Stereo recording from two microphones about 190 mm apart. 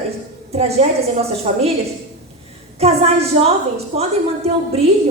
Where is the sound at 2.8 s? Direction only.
30° right (ahead or behind).